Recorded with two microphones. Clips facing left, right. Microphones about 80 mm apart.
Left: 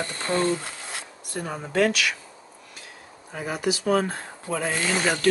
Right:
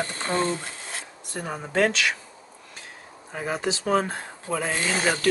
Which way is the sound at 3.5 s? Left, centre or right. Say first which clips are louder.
Left 1 dB; right.